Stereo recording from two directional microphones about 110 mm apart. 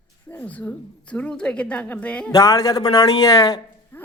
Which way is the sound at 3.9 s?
20° left (ahead or behind).